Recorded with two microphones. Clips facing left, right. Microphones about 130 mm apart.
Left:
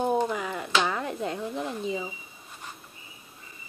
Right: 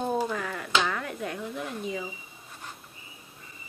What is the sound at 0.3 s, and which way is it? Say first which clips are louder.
Finger snapping: left 2 dB; 20° left (ahead or behind).